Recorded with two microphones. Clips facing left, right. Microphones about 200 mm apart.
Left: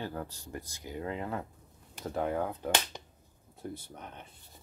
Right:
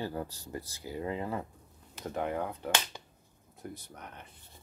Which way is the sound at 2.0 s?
Centre (ahead or behind).